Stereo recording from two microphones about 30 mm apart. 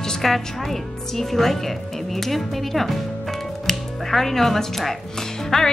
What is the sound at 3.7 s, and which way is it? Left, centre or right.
Music, centre.